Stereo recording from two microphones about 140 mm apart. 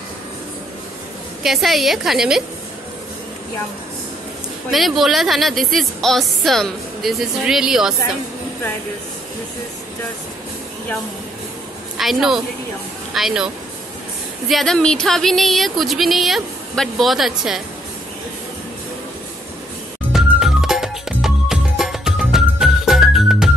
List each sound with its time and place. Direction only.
1.4 s a woman's voice: centre (ahead or behind)
4.6 s a woman's voice: centre (ahead or behind)
12.0 s a woman's voice: centre (ahead or behind)
14.5 s a woman's voice: centre (ahead or behind)
20.1 s music: 5° right (ahead or behind)